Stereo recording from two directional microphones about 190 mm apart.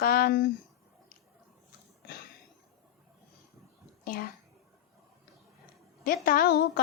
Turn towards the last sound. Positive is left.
turn(degrees=55)  # may be behind; listen again after turning